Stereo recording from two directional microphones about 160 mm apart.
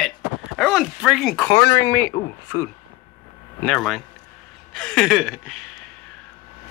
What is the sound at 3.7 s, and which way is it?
Speech, centre (ahead or behind).